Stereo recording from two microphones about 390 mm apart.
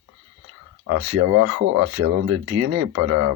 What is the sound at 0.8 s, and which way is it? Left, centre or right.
Speech, right.